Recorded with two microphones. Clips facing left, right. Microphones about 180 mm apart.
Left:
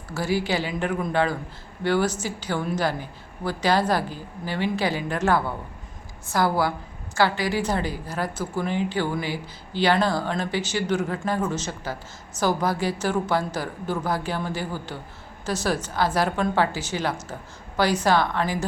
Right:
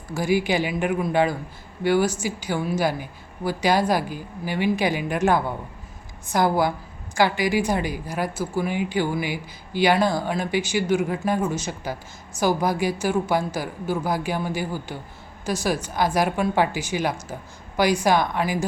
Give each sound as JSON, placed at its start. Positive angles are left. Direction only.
{"t": 0.1, "sound": "a woman's voice", "side_deg": -15}